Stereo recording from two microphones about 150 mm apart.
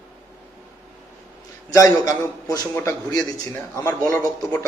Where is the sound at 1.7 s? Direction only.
25° left (ahead or behind).